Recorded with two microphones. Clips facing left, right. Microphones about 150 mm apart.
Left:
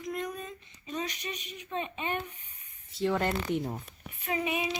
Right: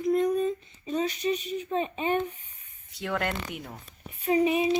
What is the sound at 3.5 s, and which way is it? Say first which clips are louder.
Speech: left 8 dB; 25° left (ahead or behind).